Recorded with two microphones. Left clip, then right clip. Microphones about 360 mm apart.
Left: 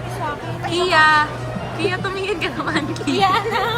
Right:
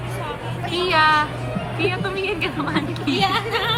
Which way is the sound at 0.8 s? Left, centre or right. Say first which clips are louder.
Left 3 dB; centre.